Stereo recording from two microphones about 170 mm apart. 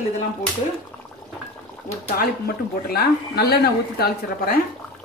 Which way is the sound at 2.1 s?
65° left (ahead or behind).